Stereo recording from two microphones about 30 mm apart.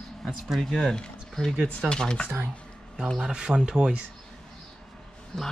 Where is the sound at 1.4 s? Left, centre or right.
Left.